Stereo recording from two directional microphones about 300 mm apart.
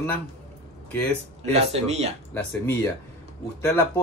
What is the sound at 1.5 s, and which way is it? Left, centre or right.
Speech, right.